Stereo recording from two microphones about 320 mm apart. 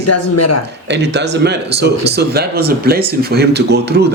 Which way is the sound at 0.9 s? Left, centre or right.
Right.